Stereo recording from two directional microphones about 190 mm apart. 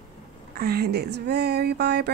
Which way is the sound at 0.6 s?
55° right (ahead or behind).